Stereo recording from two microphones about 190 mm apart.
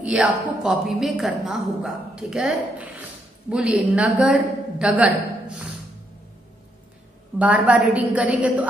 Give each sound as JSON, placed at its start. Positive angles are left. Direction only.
{"t": 0.0, "sound": "a woman's voice", "side_deg": -5}
{"t": 7.3, "sound": "a woman's voice", "side_deg": -5}